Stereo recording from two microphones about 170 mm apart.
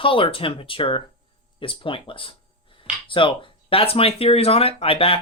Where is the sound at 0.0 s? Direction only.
30° left (ahead or behind).